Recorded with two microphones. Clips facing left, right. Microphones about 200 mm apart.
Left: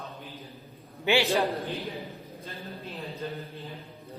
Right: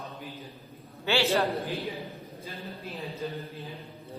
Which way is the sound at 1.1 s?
15° left (ahead or behind).